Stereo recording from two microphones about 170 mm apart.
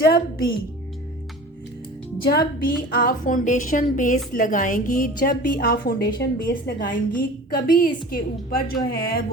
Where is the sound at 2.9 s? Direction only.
55° left (ahead or behind).